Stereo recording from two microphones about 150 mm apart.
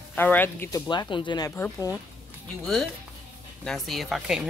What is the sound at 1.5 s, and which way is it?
Speech, 15° left (ahead or behind).